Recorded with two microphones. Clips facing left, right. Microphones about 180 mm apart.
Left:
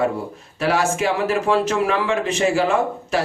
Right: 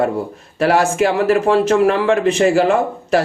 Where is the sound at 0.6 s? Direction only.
55° right (ahead or behind).